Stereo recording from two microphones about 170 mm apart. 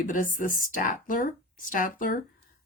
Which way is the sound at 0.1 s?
50° left (ahead or behind).